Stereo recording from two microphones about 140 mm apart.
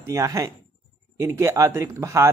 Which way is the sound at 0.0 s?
20° right (ahead or behind).